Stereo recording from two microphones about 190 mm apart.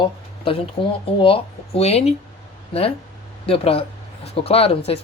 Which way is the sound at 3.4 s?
30° left (ahead or behind).